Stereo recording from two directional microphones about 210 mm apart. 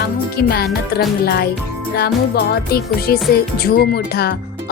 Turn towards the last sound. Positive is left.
turn(degrees=50)  # may be behind; listen again after turning